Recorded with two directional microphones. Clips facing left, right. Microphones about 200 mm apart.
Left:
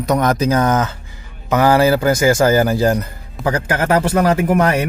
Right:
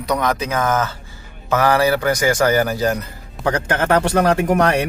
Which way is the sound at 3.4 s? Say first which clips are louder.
Left 1 dB; 5° left (ahead or behind).